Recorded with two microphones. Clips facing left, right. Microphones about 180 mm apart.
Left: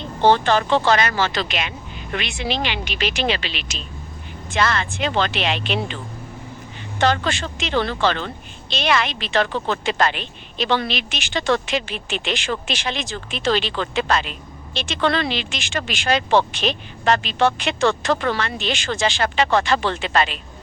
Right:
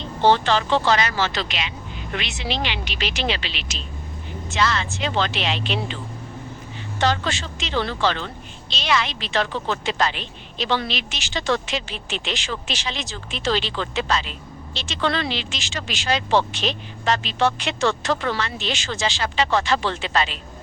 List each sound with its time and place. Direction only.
0.2 s a woman's voice: 50° left (ahead or behind)
7.0 s a woman's voice: 55° left (ahead or behind)